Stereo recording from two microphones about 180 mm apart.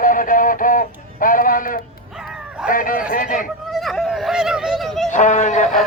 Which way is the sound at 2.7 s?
50° left (ahead or behind).